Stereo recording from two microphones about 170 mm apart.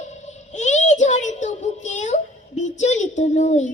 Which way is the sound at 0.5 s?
45° left (ahead or behind).